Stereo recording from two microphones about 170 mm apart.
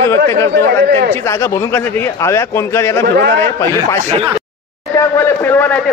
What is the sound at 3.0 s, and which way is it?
Speech, 70° right (ahead or behind).